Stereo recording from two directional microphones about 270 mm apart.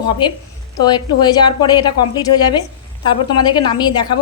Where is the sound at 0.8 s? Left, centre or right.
Centre.